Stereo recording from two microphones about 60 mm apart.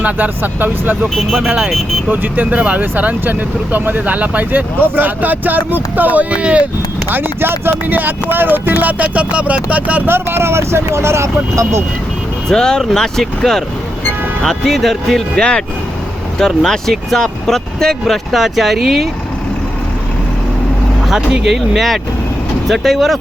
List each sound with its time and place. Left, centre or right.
0.0 s speech: right
1.1 s speech: centre
1.5 s speech: right
7.1 s speech: right
10.1 s speech: right
12.5 s speech: centre
21.1 s speech: centre